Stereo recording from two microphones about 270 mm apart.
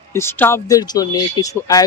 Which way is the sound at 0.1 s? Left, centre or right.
Centre.